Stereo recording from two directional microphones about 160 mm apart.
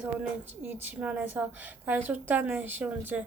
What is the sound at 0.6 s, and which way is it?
A woman's voice, 10° right (ahead or behind).